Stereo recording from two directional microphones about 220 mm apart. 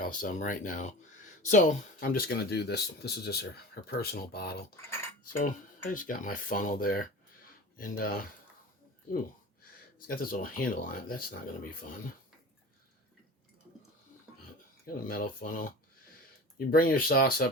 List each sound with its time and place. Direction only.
0.0 s speech: 35° left (ahead or behind)
10.1 s speech: 40° left (ahead or behind)
15.0 s speech: 40° left (ahead or behind)